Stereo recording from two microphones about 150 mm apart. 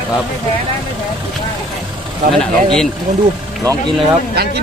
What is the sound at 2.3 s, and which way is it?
Speech, 5° left (ahead or behind).